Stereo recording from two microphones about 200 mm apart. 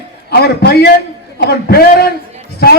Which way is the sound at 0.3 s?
55° left (ahead or behind).